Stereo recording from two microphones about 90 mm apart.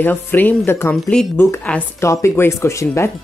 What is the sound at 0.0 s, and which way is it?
Speech, 20° left (ahead or behind).